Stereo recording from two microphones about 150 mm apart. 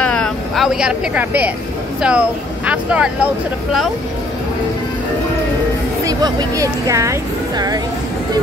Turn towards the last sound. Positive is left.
turn(degrees=-25)  # may be behind; listen again after turning